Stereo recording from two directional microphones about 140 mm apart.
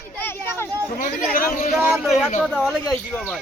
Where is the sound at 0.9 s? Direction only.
70° left (ahead or behind).